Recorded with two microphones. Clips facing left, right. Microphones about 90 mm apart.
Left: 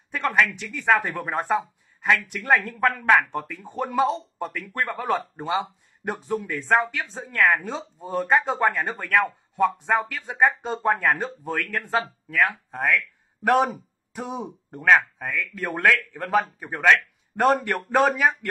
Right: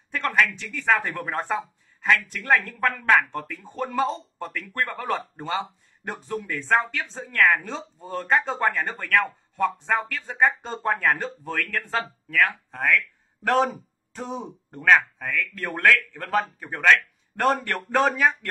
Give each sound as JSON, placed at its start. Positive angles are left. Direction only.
{"t": 0.1, "sound": "a man's voice", "side_deg": 15}